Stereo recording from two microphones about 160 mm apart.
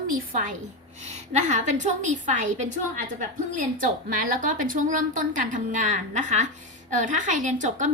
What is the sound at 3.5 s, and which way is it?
A woman's voice, 55° right (ahead or behind).